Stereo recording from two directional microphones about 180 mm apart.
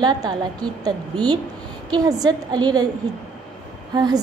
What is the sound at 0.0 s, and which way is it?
A woman's voice, 20° right (ahead or behind).